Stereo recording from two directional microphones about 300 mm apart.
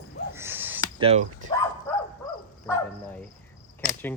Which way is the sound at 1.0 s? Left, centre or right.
Right.